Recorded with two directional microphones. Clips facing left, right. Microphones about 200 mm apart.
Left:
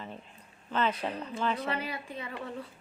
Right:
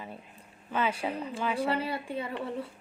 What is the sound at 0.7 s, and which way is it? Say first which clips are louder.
Speech: even; 10° right (ahead or behind).